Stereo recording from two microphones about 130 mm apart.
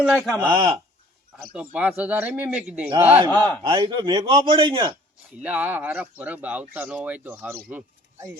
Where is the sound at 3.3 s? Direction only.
10° left (ahead or behind).